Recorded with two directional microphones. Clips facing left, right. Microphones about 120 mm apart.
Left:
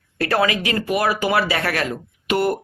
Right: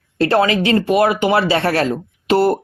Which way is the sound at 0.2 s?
25° right (ahead or behind).